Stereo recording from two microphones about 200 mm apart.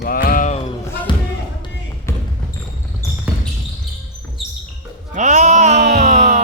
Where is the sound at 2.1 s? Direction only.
15° left (ahead or behind).